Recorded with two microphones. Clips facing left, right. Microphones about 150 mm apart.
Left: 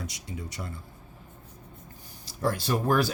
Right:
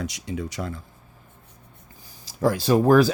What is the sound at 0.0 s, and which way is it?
Speech, 90° right.